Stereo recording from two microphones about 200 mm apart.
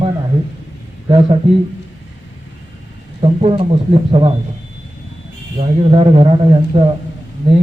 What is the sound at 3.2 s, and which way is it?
Speech, 30° right (ahead or behind).